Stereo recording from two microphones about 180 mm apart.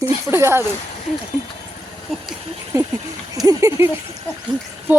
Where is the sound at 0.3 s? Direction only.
15° right (ahead or behind).